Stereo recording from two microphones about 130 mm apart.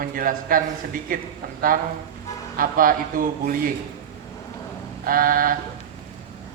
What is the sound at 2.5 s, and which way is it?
Mantra, 90° right.